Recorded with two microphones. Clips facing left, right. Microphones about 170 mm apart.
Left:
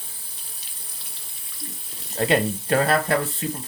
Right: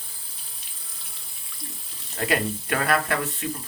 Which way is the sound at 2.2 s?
30° left (ahead or behind).